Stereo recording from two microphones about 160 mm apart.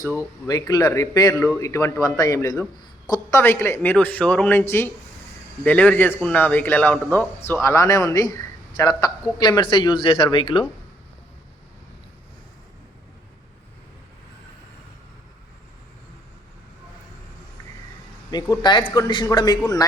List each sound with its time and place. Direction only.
0.1 s a man's voice: 20° left (ahead or behind)
5.6 s speech: 10° left (ahead or behind); by 10.7 s 35° left (ahead or behind)
18.3 s a man's voice: 25° left (ahead or behind)